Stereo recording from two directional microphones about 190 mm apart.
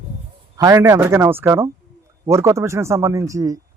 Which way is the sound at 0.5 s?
20° right (ahead or behind).